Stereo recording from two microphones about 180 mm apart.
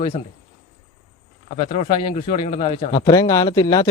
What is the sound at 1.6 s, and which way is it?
A man's voice, 35° left (ahead or behind).